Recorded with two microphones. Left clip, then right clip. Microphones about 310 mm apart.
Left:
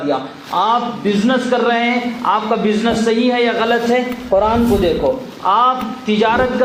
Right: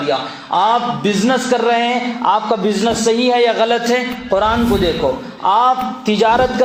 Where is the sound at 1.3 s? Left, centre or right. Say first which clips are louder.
Right 1 dB; right.